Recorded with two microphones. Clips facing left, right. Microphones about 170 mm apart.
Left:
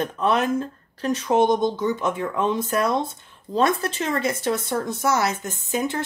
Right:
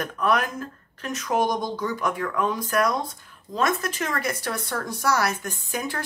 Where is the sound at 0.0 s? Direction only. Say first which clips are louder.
Left 2 dB; 25° left (ahead or behind).